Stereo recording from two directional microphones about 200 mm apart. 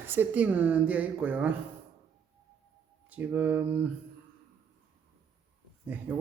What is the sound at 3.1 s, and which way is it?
Speech, 5° right (ahead or behind).